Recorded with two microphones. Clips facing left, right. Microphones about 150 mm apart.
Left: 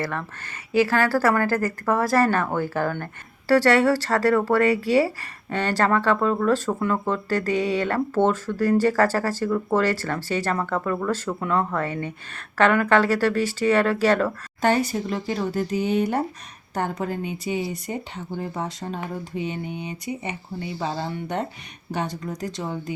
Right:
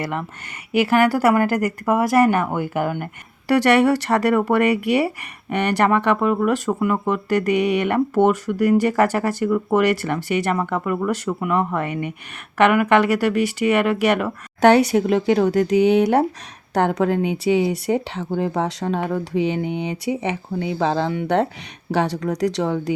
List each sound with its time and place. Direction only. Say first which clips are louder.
0.7 s speech: right 3 dB; 20° right (ahead or behind)
14.6 s speech: right 8 dB; 75° right (ahead or behind)